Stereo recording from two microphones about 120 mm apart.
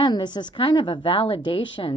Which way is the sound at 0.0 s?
40° left (ahead or behind).